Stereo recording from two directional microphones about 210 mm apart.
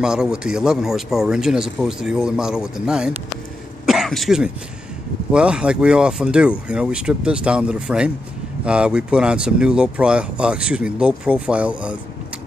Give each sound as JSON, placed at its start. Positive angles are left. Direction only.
{"t": 0.0, "sound": "speech", "side_deg": -5}